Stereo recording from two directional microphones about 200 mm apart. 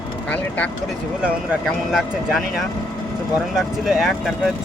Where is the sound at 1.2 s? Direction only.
5° right (ahead or behind).